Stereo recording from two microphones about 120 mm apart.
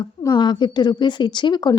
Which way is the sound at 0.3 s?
40° left (ahead or behind).